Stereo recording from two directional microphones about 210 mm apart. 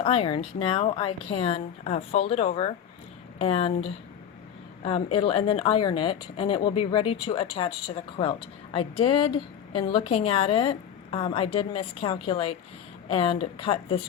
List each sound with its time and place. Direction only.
0.0 s a woman's voice: 30° left (ahead or behind)